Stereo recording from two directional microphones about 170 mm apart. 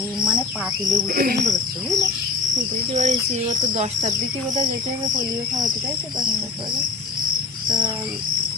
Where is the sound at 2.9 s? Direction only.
45° right (ahead or behind).